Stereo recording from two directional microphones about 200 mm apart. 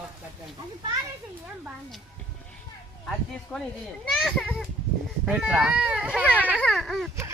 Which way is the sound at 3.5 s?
10° left (ahead or behind).